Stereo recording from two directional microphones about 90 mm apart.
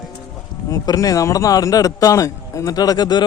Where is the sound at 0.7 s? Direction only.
40° left (ahead or behind).